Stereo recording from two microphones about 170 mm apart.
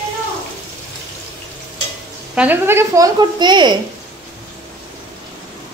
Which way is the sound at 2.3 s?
10° right (ahead or behind).